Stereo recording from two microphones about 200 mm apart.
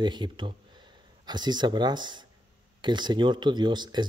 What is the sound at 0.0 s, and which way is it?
A man's voice, 20° right (ahead or behind).